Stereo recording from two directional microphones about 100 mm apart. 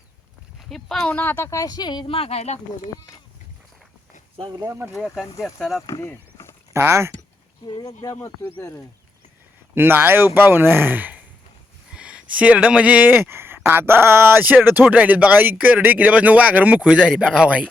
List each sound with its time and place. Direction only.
0.6 s speech: 5° left (ahead or behind)
1.1 s speech: 20° left (ahead or behind)
1.5 s a woman's voice: 35° left (ahead or behind)
2.0 s speech: 75° left (ahead or behind); by 2.6 s 90° left
4.6 s speech: 30° right (ahead or behind)
4.9 s speech: 5° right (ahead or behind)
6.0 s a sound: 25° left (ahead or behind)
6.7 s speech: 25° right (ahead or behind)
8.2 s speech: 25° left (ahead or behind)
9.7 s speech: 20° right (ahead or behind)